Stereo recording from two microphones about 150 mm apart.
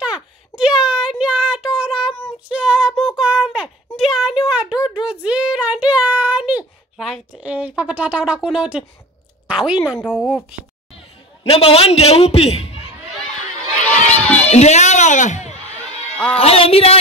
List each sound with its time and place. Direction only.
0.0 s a sound: 5° right (ahead or behind)
5.0 s child singing: 10° right (ahead or behind)
9.5 s a woman's voice: 5° right (ahead or behind)
11.4 s a man's voice: 40° left (ahead or behind)
14.0 s run: 10° left (ahead or behind)
14.4 s a woman's voice: 45° left (ahead or behind)
16.3 s a man's voice: 40° left (ahead or behind)